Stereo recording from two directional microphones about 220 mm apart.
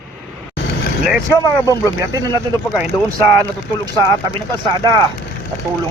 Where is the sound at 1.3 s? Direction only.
15° left (ahead or behind).